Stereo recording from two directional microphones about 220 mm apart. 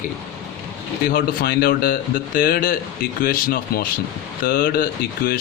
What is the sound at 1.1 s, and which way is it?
A man's voice, 40° left (ahead or behind).